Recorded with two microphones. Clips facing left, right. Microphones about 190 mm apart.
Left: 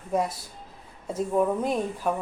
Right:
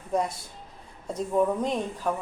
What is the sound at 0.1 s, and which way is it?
A woman's voice, 5° left (ahead or behind).